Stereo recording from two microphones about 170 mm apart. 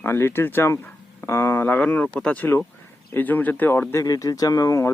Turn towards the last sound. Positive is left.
turn(degrees=15)  # may be behind; listen again after turning